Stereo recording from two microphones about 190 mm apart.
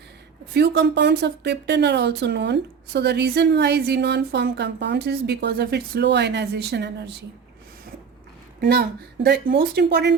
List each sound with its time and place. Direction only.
0.5 s speech: 60° right (ahead or behind)
8.6 s speech: 55° right (ahead or behind)